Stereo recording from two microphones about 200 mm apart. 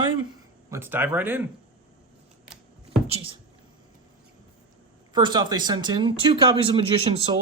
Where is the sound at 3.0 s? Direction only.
30° right (ahead or behind).